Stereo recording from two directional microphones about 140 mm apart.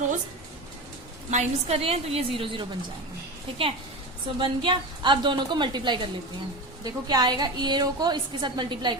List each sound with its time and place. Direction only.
1.3 s a woman's voice: 55° right (ahead or behind); by 2.6 s 40° right (ahead or behind)
4.4 s a woman's voice: 35° right (ahead or behind)